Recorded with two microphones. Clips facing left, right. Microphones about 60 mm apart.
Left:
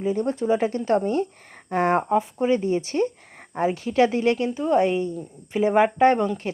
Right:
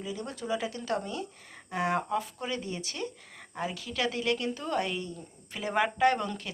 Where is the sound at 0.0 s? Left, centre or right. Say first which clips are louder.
Left 13 dB; left.